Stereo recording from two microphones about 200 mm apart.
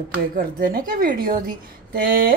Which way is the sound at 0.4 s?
45° right (ahead or behind).